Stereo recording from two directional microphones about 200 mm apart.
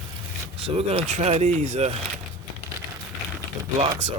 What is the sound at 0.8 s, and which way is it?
Speech, 30° right (ahead or behind).